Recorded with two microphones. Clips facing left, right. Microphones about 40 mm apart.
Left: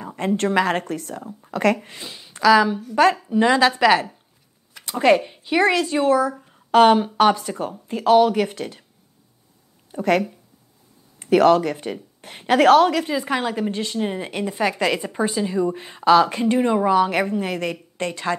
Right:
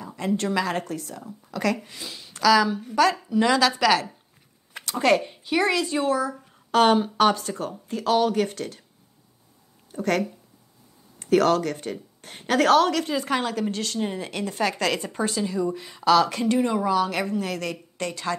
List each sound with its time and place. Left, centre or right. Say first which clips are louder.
0.0 s a woman's voice: left 4 dB; left; by 5.5 s centre
5.5 s a woman's voice: left 4 dB; left
6.0 s a woman's voice: left 8 dB; left
6.3 s a woman's voice: left 6 dB; centre
9.9 s a woman's voice: left 5 dB; left
15.5 s a woman's voice: left 4 dB; left